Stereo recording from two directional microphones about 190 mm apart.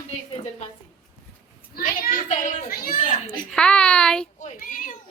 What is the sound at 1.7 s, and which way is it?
A child's voice, 45° left (ahead or behind).